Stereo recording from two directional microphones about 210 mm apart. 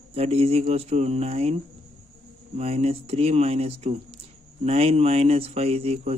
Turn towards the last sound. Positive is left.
turn(degrees=-30)  # may be behind; listen again after turning